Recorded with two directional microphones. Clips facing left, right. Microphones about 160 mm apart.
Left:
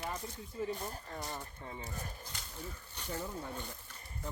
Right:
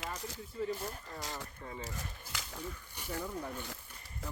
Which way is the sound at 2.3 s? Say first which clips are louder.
Right 5 dB; 90° right.